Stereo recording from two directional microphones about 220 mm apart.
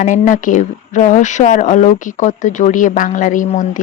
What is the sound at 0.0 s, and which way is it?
Speech, 35° left (ahead or behind).